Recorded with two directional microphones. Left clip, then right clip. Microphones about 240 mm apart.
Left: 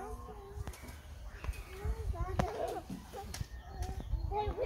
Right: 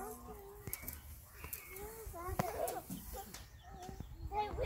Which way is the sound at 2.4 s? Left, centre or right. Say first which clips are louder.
Left 3 dB; centre.